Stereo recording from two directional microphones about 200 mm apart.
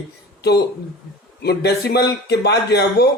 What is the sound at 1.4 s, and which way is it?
Speech, 55° left (ahead or behind).